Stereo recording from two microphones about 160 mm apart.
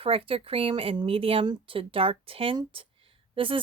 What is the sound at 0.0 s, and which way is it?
Speech, 35° right (ahead or behind).